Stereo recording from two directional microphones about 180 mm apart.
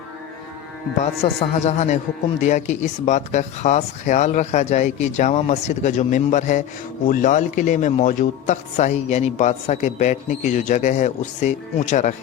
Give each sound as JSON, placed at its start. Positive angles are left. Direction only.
{"t": 1.2, "sound": "a man's voice", "side_deg": 35}